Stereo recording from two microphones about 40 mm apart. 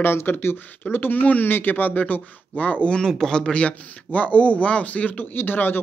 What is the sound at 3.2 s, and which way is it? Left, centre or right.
Speech, centre.